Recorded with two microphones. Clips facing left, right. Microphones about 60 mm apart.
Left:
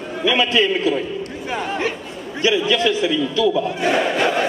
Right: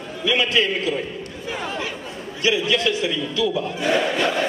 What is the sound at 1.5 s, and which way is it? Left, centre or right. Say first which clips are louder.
Speech: left 5 dB; left.